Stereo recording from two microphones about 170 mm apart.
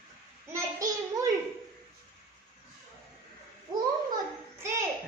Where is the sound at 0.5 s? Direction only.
20° right (ahead or behind).